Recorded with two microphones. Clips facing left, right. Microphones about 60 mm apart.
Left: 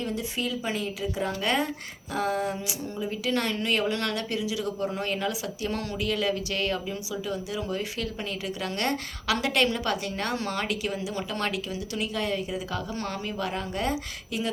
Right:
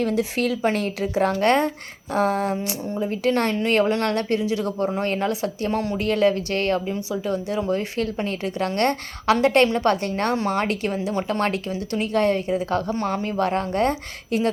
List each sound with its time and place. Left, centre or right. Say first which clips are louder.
0.0 s a woman's voice: right 8 dB; right
3.0 s a woman's voice: right 7 dB; right
5.7 s a woman's voice: right 6 dB; right
10.3 s speech: right 7 dB; right
12.9 s speech: right 8 dB; right
13.3 s a woman's voice: right 10 dB; right